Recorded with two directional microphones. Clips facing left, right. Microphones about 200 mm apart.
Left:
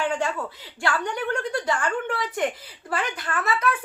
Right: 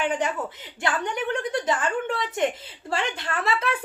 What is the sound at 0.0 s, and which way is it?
A woman's voice, 20° right (ahead or behind).